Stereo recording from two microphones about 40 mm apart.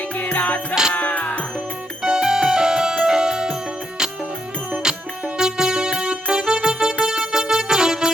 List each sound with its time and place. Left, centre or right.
0.2 s music: left
2.0 s music: centre
5.4 s music: centre